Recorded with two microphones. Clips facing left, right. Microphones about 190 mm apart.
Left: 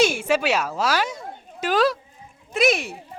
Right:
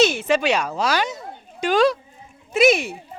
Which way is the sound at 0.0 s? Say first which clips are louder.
Right 2 dB; 10° left (ahead or behind).